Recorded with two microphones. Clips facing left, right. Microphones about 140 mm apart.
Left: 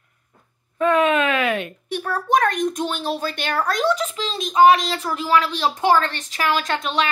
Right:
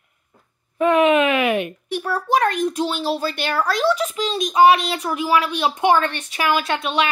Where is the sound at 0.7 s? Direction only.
20° right (ahead or behind).